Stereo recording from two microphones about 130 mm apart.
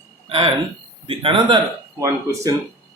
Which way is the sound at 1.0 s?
45° right (ahead or behind).